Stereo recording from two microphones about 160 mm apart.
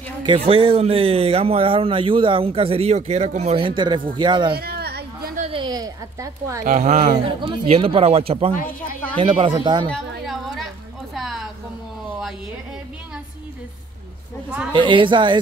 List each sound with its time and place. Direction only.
0.2 s speech: 30° right (ahead or behind)
4.6 s a sound: 80° right
5.5 s speech: 30° right (ahead or behind)
6.6 s speech: 50° right (ahead or behind)
7.3 s speech: 35° right (ahead or behind)
10.2 s music: centre (ahead or behind)
11.1 s a sound: centre (ahead or behind)
14.7 s speech: 30° right (ahead or behind)